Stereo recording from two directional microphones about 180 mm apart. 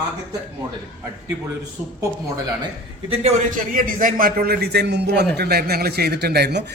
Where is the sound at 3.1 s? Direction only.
35° right (ahead or behind).